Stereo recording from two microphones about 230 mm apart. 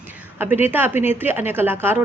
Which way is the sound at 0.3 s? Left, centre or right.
Centre.